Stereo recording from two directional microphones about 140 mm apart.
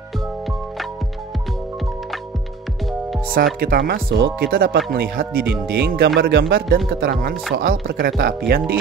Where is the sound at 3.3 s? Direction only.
90° right.